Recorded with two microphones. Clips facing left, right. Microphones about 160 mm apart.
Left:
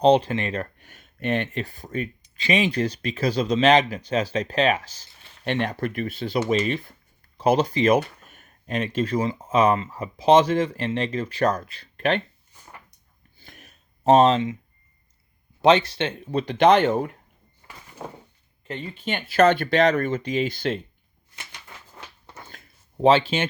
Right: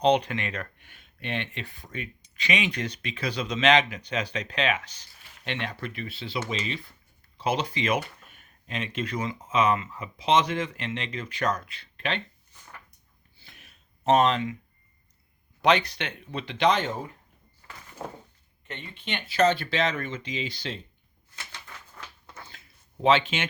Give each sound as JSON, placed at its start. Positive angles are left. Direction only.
{"t": 0.0, "sound": "speech", "side_deg": 30}
{"t": 13.4, "sound": "a sound", "side_deg": 45}
{"t": 14.0, "sound": "speech", "side_deg": 30}
{"t": 15.6, "sound": "speech", "side_deg": 30}
{"t": 16.2, "sound": "speech", "side_deg": 40}
{"t": 18.7, "sound": "speech", "side_deg": 40}
{"t": 21.3, "sound": "a sound", "side_deg": 20}
{"t": 22.4, "sound": "a sound", "side_deg": 50}
{"t": 23.0, "sound": "speech", "side_deg": 35}